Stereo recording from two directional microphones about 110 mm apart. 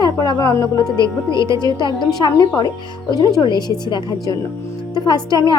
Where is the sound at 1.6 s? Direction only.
40° left (ahead or behind).